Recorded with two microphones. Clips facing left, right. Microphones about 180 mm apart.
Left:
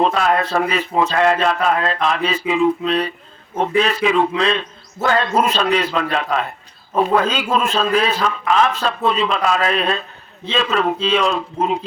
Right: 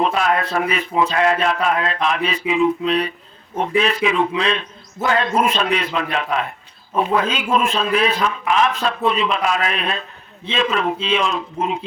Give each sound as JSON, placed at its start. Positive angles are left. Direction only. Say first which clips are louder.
{"t": 0.2, "sound": "a man's voice", "louder": "left 2 dB", "side_deg": 35}